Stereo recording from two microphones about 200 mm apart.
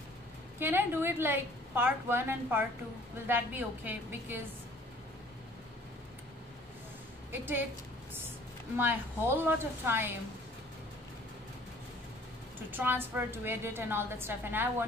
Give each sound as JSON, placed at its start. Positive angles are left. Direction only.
{"t": 0.6, "sound": "a woman's voice", "side_deg": -10}
{"t": 8.7, "sound": "a woman's voice", "side_deg": -10}
{"t": 12.7, "sound": "a woman's voice", "side_deg": -10}